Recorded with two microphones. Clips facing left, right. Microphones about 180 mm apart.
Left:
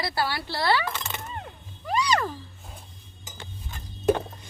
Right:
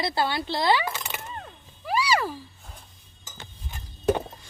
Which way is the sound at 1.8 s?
5° right (ahead or behind).